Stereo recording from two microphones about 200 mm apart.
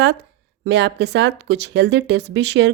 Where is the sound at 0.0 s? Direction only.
60° right (ahead or behind).